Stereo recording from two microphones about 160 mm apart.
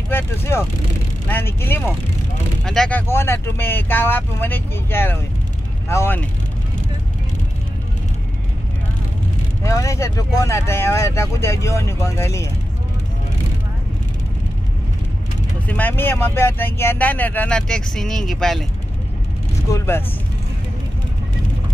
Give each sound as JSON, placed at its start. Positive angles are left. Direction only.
{"t": 0.1, "sound": "speech", "side_deg": 15}
{"t": 9.7, "sound": "speech", "side_deg": 20}
{"t": 15.7, "sound": "speech", "side_deg": 10}
{"t": 19.7, "sound": "speech", "side_deg": 20}